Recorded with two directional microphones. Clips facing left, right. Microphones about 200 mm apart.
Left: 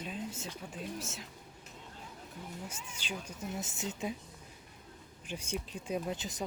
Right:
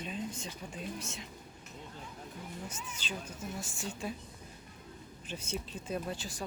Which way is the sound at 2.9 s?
10° left (ahead or behind).